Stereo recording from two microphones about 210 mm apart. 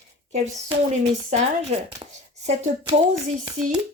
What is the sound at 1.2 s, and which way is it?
Speech, 35° right (ahead or behind).